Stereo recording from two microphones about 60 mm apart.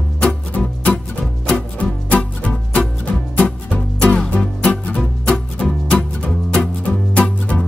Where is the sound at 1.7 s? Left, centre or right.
Left.